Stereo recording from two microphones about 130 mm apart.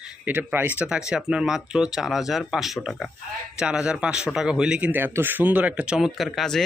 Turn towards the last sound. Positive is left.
turn(degrees=0)  # may be behind; listen again after turning